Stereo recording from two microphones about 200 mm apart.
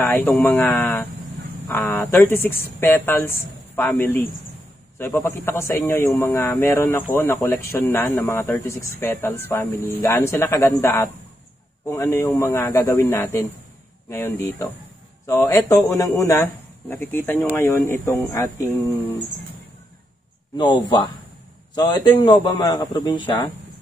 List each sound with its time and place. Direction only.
0.0 s speech: 10° left (ahead or behind)
20.5 s a man's voice: 25° left (ahead or behind)